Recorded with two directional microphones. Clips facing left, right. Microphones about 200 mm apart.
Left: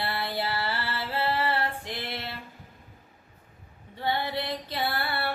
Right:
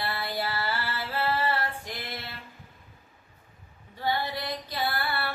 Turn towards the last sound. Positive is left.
turn(degrees=25)  # may be behind; listen again after turning